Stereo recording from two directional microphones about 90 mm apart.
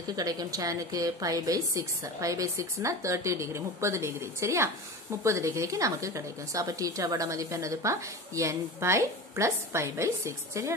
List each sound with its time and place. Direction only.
0.1 s a woman's voice: 45° right (ahead or behind)